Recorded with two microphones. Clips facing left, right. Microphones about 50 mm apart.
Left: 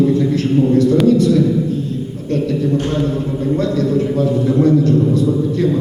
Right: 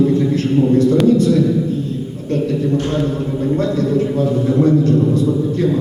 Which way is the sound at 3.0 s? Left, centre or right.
Right.